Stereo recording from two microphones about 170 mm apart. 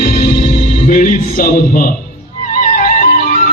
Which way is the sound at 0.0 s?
55° left (ahead or behind).